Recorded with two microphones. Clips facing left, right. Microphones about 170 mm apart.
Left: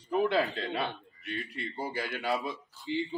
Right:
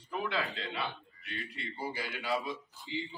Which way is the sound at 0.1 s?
40° left (ahead or behind).